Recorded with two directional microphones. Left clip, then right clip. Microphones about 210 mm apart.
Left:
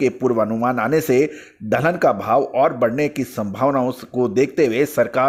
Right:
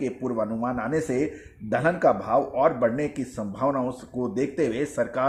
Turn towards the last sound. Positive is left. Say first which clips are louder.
# left 8 dB
turn(degrees=30)  # may be behind; listen again after turning